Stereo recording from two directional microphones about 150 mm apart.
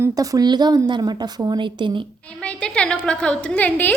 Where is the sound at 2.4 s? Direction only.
5° left (ahead or behind).